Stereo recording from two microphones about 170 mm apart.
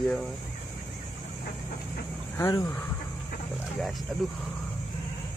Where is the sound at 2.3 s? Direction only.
15° left (ahead or behind).